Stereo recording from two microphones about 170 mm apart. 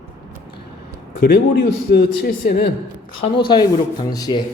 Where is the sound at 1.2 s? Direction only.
70° left (ahead or behind).